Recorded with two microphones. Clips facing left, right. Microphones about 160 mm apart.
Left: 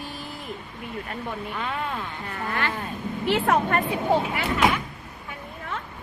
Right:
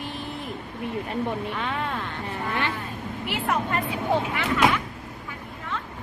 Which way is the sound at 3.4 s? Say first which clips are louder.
Left 1 dB; 55° left (ahead or behind).